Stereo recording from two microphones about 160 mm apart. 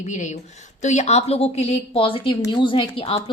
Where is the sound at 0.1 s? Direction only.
50° left (ahead or behind).